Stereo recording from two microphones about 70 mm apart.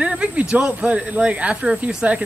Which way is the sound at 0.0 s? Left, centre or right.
Centre.